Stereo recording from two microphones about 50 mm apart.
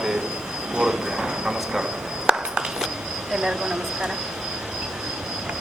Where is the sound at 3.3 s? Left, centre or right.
Centre.